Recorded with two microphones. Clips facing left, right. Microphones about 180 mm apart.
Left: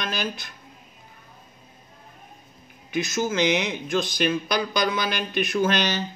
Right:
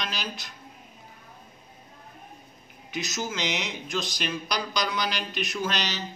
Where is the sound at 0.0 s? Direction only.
50° left (ahead or behind).